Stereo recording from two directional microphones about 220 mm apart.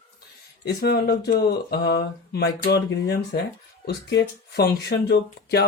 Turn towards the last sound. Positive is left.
turn(degrees=50)  # may be behind; listen again after turning